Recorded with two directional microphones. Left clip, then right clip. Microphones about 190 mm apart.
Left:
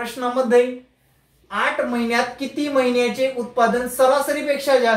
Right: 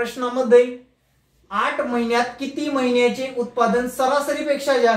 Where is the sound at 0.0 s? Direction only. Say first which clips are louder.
Left 1 dB; 10° right (ahead or behind).